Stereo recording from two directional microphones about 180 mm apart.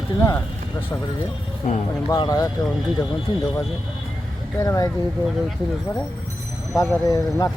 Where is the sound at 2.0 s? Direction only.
20° left (ahead or behind).